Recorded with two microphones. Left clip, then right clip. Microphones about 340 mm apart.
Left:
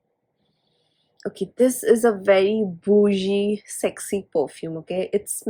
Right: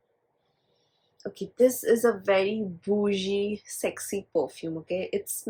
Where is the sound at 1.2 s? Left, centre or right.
Left.